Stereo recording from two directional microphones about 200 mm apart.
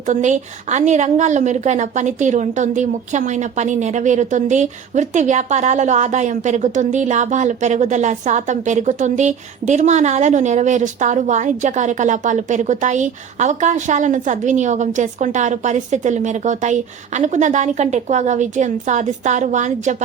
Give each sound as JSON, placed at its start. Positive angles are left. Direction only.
{"t": 0.1, "sound": "a woman's voice", "side_deg": -35}